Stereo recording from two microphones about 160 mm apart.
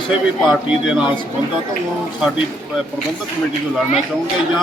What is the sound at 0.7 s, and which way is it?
Speech, 5° right (ahead or behind).